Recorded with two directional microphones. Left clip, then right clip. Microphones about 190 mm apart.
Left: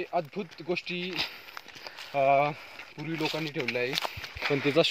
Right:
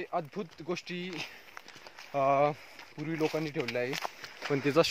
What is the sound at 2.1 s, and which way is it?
Speech, 15° right (ahead or behind).